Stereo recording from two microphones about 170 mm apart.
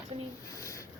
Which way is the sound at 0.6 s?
15° left (ahead or behind).